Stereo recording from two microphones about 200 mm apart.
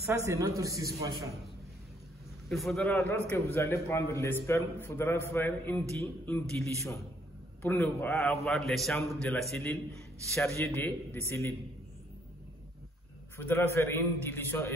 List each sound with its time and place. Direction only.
0.0 s a man's voice: 15° right (ahead or behind)
2.5 s a man's voice: centre (ahead or behind)
2.9 s a man's voice: 15° left (ahead or behind)
13.4 s a man's voice: 10° left (ahead or behind)